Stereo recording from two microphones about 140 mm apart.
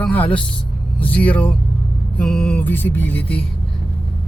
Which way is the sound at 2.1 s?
5° left (ahead or behind).